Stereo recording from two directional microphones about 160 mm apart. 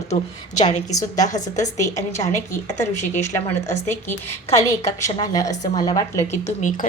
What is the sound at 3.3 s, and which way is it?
A woman's voice, 15° left (ahead or behind).